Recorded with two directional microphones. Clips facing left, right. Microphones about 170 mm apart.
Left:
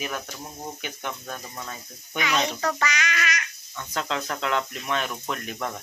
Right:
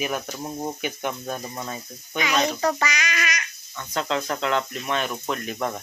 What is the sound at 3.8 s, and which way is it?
Speech, centre (ahead or behind).